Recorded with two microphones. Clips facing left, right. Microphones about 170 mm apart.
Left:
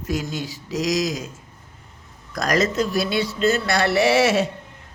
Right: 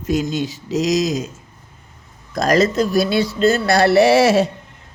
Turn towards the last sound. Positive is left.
turn(degrees=-35)  # may be behind; listen again after turning